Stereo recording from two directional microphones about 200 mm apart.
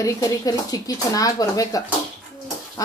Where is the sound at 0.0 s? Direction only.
20° left (ahead or behind).